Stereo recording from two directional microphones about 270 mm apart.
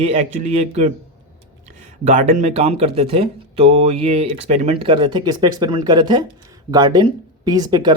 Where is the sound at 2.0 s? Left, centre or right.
Right.